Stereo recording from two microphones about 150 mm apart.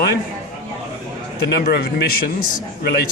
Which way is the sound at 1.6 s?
90° left.